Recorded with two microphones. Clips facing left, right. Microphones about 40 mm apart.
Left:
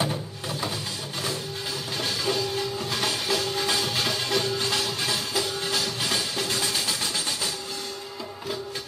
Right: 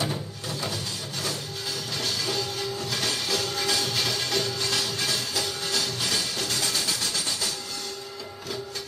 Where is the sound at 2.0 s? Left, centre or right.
Left.